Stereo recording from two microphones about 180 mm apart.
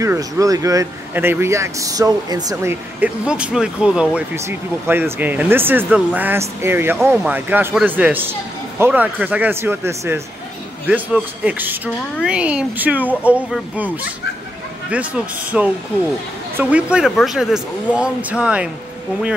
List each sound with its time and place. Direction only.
0.0 s speech: 20° right (ahead or behind)
14.9 s speech: 10° right (ahead or behind)